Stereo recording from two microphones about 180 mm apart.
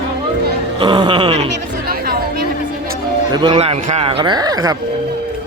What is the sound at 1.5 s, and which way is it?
Chatter, 60° right (ahead or behind).